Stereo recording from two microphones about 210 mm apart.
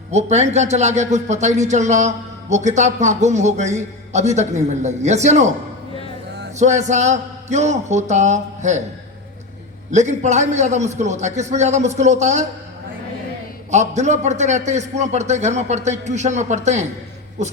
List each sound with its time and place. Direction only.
0.1 s speech: 30° right (ahead or behind)
6.6 s speech: 35° right (ahead or behind)
9.9 s speech: 35° right (ahead or behind)
13.7 s speech: 35° right (ahead or behind)